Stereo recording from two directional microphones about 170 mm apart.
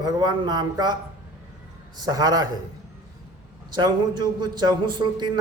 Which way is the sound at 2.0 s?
20° right (ahead or behind).